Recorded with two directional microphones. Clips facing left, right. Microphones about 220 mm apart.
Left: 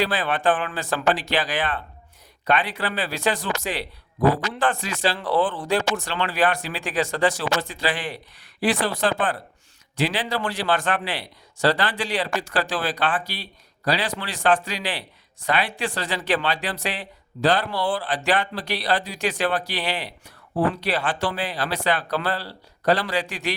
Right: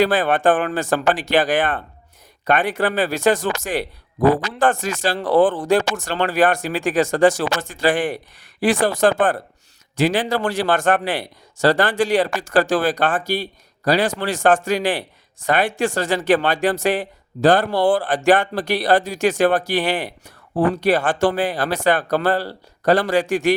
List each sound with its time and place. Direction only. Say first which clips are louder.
0.0 s speech: right 6 dB; 50° right (ahead or behind)